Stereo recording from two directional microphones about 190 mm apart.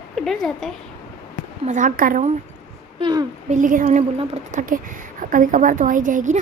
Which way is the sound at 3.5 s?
45° right (ahead or behind).